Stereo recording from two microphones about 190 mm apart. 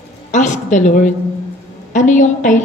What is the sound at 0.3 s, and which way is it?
A woman's voice, 40° left (ahead or behind).